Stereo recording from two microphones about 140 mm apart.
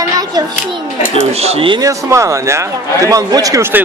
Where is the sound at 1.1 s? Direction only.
45° right (ahead or behind).